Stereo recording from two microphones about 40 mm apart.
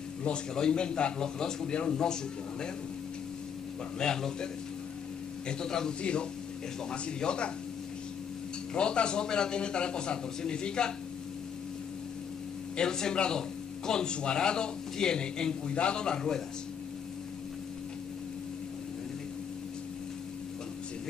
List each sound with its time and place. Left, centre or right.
0.6 s speech: left
4.0 s a man's voice: centre
5.5 s a man's voice: centre
8.7 s speech: left
12.7 s speech: centre